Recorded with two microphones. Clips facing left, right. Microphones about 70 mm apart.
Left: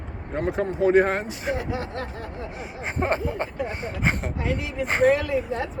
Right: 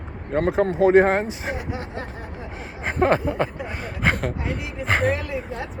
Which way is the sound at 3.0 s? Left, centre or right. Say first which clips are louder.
Right 5 dB; right.